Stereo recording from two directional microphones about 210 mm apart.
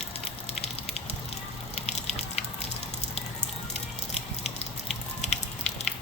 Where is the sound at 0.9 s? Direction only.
30° left (ahead or behind).